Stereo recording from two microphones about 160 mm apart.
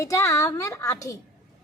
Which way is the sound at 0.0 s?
20° left (ahead or behind).